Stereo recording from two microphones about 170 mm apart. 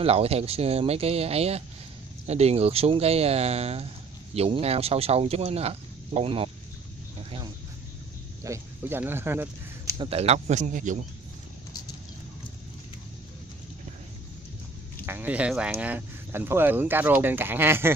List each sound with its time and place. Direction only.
0.0 s speech: 35° right (ahead or behind)
8.5 s speech: 15° right (ahead or behind)
9.9 s speech: 35° right (ahead or behind)
15.0 s speech: 10° right (ahead or behind)